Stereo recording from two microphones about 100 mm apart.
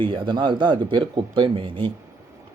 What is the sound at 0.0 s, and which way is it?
A man's voice, 55° right (ahead or behind).